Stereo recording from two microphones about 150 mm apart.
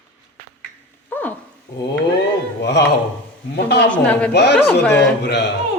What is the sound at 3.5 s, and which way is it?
Speech, 90° left.